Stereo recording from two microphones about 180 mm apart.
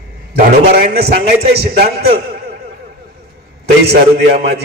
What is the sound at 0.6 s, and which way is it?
Speech, 60° right (ahead or behind).